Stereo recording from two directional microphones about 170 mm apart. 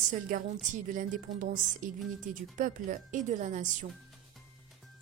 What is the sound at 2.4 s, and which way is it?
Speech, 50° right (ahead or behind).